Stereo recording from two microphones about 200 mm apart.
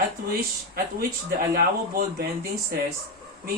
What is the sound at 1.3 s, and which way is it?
Speech, 45° right (ahead or behind).